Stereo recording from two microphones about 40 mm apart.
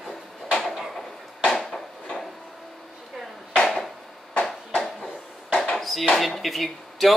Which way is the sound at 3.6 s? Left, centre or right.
Centre.